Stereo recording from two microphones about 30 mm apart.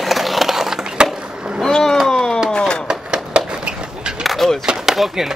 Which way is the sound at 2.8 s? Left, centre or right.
Right.